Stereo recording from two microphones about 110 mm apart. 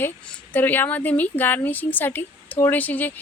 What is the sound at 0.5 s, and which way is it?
A woman's voice, 15° left (ahead or behind).